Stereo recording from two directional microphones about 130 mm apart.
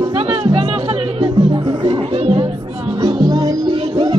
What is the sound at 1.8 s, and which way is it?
Music, 45° right (ahead or behind).